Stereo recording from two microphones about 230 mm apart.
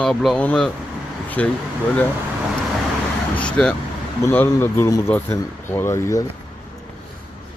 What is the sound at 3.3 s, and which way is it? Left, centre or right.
Speech, centre.